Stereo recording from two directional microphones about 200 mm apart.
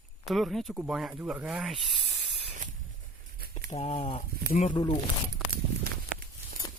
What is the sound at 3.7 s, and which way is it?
Speech, 35° left (ahead or behind).